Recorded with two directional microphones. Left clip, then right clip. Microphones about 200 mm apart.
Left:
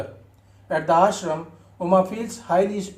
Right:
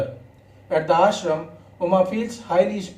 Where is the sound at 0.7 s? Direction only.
45° left (ahead or behind).